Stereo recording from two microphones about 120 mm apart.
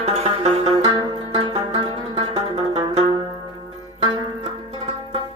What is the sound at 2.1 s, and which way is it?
Music, 50° right (ahead or behind).